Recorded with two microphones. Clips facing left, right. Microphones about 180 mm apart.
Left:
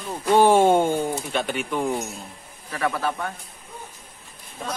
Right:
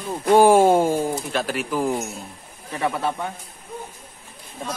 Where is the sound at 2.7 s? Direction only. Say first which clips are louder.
Right 1 dB; 20° right (ahead or behind).